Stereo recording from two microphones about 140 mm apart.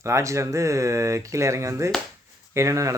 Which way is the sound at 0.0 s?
20° right (ahead or behind).